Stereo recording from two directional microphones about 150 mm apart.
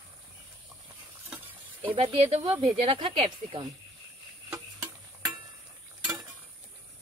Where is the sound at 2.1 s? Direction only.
40° right (ahead or behind).